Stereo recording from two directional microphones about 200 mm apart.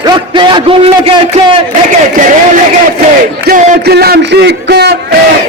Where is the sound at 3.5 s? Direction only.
50° right (ahead or behind).